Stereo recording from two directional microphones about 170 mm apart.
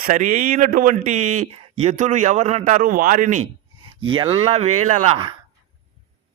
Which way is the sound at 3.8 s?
30° right (ahead or behind).